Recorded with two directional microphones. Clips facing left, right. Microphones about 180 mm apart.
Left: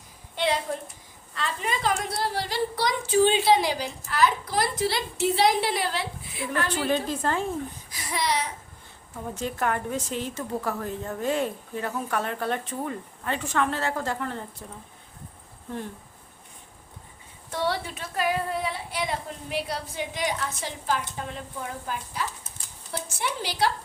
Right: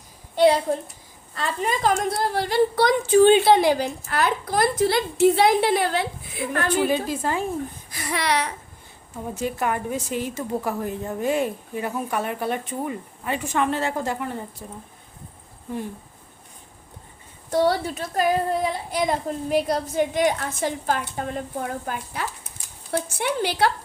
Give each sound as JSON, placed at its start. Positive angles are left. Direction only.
{"t": 0.3, "sound": "a child's voice", "side_deg": -40}
{"t": 6.8, "sound": "a woman's voice", "side_deg": -10}
{"t": 7.9, "sound": "a woman's voice", "side_deg": -60}
{"t": 9.1, "sound": "a woman's voice", "side_deg": -10}
{"t": 17.5, "sound": "a woman's voice", "side_deg": -40}